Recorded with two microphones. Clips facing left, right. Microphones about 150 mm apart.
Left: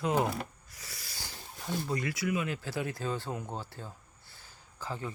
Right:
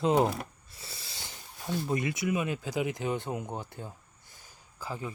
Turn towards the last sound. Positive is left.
turn(degrees=-15)  # may be behind; listen again after turning